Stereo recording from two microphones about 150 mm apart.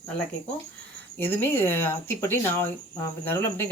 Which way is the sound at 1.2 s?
15° left (ahead or behind).